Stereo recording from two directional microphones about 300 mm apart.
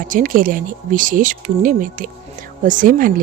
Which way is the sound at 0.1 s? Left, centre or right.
Right.